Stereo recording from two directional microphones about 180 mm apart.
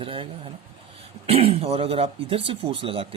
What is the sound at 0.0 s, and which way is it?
Speech, 30° right (ahead or behind).